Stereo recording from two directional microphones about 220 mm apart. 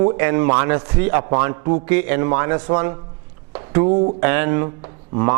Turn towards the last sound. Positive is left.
turn(degrees=-20)  # may be behind; listen again after turning